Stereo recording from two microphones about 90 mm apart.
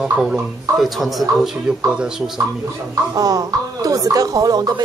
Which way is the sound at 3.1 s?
40° right (ahead or behind).